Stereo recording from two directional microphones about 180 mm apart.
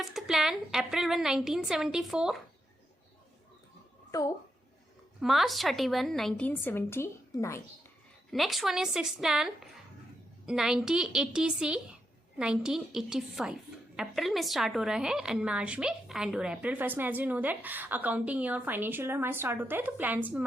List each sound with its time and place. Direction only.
0.0 s a woman's voice: centre (ahead or behind)
4.1 s a woman's voice: 20° left (ahead or behind)
5.2 s a woman's voice: centre (ahead or behind); by 7.6 s 15° left (ahead or behind)
8.3 s a woman's voice: centre (ahead or behind)